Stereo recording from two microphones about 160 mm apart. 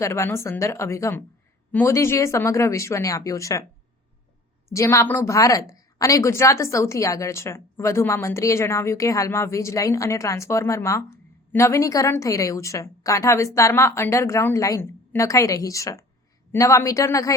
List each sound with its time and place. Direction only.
0.0 s a woman's voice: 15° left (ahead or behind)
4.7 s a woman's voice: 20° left (ahead or behind)